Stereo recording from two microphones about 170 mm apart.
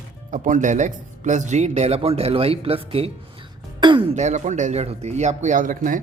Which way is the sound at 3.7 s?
30° right (ahead or behind).